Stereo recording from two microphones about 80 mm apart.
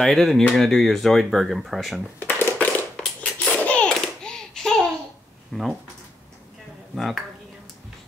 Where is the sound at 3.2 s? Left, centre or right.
Centre.